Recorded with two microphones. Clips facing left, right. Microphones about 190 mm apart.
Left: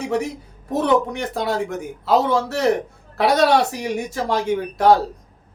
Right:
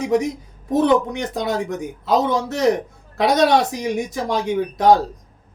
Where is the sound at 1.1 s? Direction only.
20° right (ahead or behind).